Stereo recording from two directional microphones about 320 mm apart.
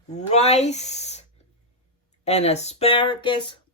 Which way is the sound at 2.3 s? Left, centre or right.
Centre.